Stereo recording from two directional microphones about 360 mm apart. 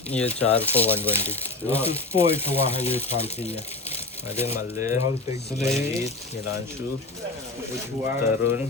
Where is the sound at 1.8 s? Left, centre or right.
Centre.